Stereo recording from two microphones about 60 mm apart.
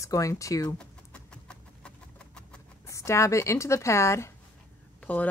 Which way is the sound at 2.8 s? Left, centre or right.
Left.